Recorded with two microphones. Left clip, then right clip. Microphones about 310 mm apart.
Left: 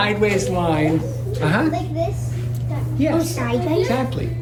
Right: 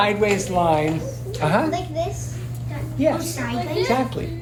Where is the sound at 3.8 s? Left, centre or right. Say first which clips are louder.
Even; centre.